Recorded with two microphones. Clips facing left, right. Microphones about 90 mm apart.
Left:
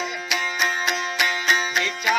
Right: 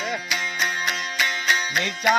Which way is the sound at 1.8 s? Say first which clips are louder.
Right 2 dB; 40° right (ahead or behind).